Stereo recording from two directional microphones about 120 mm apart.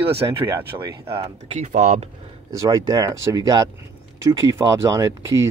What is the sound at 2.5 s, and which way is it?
Speech, 25° right (ahead or behind).